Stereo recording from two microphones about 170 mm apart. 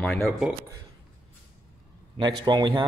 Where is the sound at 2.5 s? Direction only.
25° right (ahead or behind).